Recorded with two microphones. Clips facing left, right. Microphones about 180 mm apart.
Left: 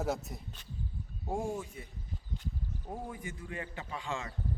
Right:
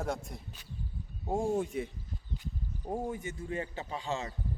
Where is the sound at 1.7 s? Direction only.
90° right.